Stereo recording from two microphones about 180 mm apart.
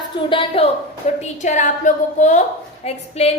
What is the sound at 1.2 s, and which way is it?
A woman's voice, 40° left (ahead or behind).